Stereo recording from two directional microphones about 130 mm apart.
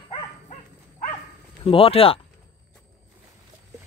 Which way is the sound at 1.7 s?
45° left (ahead or behind).